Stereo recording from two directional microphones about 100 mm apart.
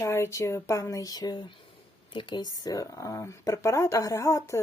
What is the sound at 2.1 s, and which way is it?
Speech, 55° left (ahead or behind).